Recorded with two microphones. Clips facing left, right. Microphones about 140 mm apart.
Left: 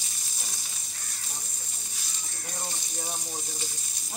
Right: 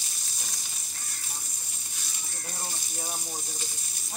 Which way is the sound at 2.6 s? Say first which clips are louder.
Left 1 dB; 5° right (ahead or behind).